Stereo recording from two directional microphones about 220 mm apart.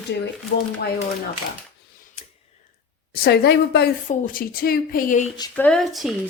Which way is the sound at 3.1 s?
45° left (ahead or behind).